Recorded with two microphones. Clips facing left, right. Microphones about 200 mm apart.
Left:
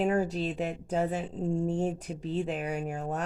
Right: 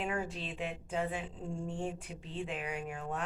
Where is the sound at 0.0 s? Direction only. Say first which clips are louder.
Left 10 dB; 40° left (ahead or behind).